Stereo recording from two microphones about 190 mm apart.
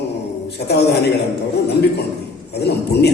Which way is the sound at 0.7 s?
60° left (ahead or behind).